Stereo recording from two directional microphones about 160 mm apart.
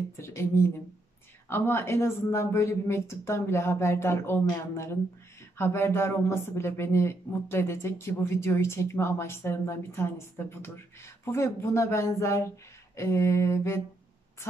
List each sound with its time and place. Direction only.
0.2 s speech: 15° left (ahead or behind)